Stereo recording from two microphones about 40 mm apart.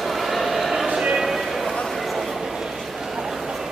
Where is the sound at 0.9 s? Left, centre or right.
Centre.